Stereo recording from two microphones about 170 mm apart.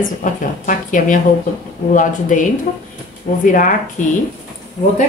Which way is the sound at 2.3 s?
50° left (ahead or behind).